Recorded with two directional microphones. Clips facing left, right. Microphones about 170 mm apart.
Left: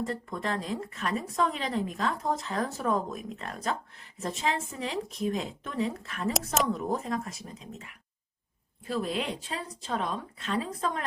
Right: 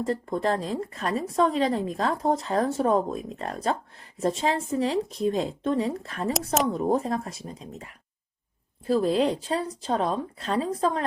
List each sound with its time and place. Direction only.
0.0 s a woman's voice: 35° right (ahead or behind)
6.3 s speech: centre (ahead or behind)
6.7 s a woman's voice: 30° right (ahead or behind)